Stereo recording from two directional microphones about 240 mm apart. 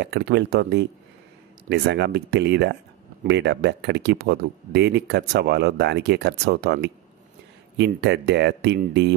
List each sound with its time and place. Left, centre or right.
0.0 s speech: right